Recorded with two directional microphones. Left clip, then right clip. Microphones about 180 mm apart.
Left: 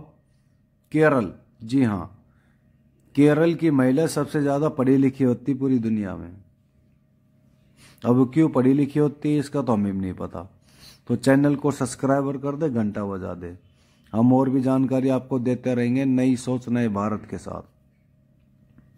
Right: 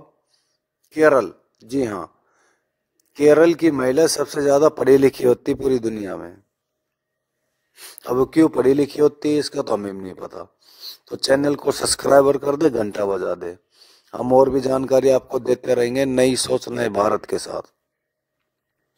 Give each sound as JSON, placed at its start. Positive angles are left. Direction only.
{"t": 0.9, "sound": "speech", "side_deg": -35}
{"t": 3.2, "sound": "a man's voice", "side_deg": -40}
{"t": 8.1, "sound": "speech", "side_deg": -35}
{"t": 10.6, "sound": "a sound", "side_deg": -25}
{"t": 11.1, "sound": "a man's voice", "side_deg": -40}